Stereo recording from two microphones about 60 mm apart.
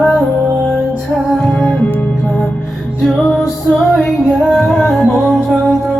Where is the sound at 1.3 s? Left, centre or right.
Centre.